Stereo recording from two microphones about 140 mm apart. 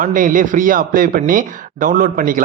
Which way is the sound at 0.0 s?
75° right (ahead or behind).